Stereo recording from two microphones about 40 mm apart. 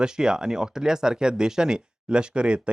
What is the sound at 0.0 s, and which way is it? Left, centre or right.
Speech, centre.